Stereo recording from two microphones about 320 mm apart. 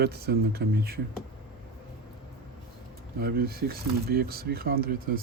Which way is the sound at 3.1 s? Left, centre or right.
Right.